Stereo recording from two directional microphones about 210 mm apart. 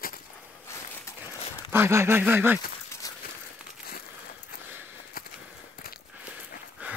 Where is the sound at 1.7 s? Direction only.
10° right (ahead or behind).